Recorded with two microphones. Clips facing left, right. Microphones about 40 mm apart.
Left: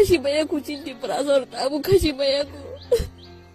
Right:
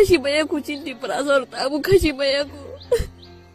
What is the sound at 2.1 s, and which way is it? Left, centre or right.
Speech, right.